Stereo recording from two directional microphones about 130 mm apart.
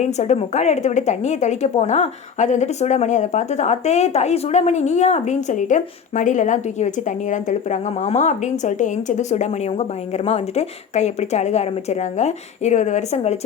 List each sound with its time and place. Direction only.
0.0 s a woman's voice: 60° left (ahead or behind)